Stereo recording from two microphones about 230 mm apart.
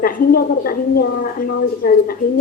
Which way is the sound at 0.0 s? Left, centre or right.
Left.